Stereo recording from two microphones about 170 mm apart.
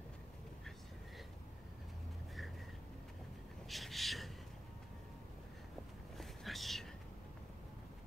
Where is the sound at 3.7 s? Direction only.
Centre (ahead or behind).